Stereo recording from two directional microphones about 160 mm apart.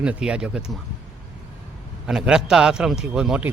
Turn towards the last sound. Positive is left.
turn(degrees=-5)  # may be behind; listen again after turning